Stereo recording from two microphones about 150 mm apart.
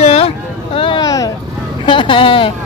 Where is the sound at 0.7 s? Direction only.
35° left (ahead or behind).